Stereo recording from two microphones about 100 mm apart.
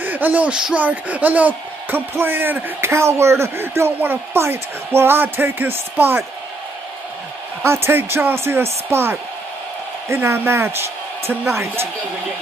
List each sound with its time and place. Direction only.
0.0 s speech: 15° right (ahead or behind)
7.6 s speech: 25° right (ahead or behind)